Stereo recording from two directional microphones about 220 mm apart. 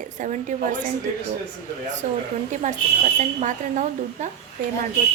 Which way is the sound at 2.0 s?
35° right (ahead or behind).